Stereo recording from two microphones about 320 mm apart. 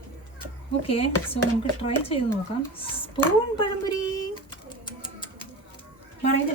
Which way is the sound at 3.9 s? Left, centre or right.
Centre.